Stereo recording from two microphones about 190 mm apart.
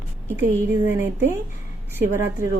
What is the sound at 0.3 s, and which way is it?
A woman's voice, 10° right (ahead or behind).